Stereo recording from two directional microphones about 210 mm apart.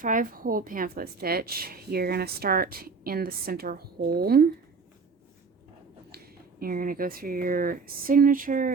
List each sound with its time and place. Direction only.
0.0 s a woman's voice: 40° right (ahead or behind)
6.1 s speech: 45° right (ahead or behind)